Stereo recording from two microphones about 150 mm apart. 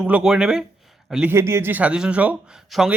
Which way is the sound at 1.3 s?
15° right (ahead or behind).